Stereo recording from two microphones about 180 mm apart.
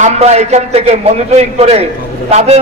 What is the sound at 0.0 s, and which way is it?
A man's voice, 40° right (ahead or behind).